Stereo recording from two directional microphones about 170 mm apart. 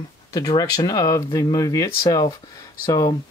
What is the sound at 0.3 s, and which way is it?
Speech, 20° left (ahead or behind).